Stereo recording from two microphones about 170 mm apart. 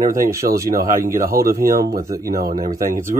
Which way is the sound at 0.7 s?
55° right (ahead or behind).